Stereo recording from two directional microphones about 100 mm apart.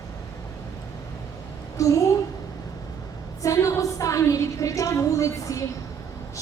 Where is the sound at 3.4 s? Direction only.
35° left (ahead or behind).